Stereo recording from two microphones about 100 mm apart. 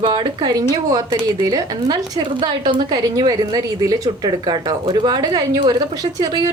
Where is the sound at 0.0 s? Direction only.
50° right (ahead or behind).